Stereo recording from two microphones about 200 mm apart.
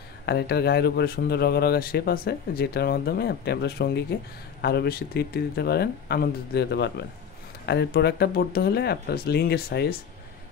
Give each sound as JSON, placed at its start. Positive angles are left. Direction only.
{"t": 0.3, "sound": "speech", "side_deg": 55}